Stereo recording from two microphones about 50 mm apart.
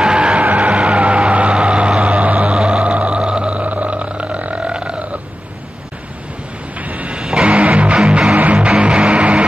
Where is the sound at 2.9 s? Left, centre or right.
Right.